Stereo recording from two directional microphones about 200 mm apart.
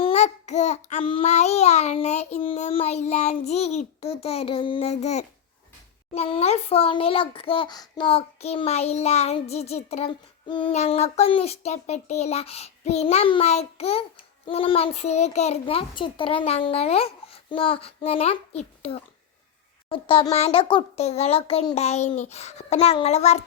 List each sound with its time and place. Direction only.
0.0 s a child's voice: 35° left (ahead or behind)